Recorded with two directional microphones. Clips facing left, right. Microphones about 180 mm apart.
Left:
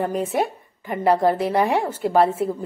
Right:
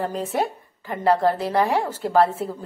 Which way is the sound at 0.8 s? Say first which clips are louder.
Left 1 dB; 20° left (ahead or behind).